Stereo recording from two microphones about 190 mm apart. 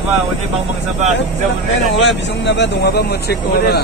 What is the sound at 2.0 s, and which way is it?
A man's voice, 65° left (ahead or behind).